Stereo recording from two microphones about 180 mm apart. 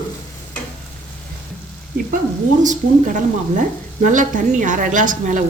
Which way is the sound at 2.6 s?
45° right (ahead or behind).